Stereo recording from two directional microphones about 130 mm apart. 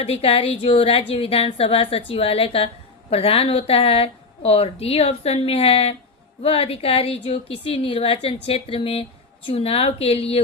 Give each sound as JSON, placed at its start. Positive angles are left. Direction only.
{"t": 0.0, "sound": "a woman's voice", "side_deg": 50}